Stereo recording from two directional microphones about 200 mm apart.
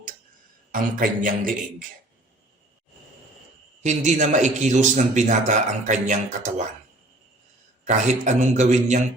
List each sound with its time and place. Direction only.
0.7 s speech: 45° right (ahead or behind)
3.8 s a man's voice: 35° right (ahead or behind)
7.9 s a man's voice: 35° right (ahead or behind)